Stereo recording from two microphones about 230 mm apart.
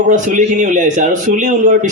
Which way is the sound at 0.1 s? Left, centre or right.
Right.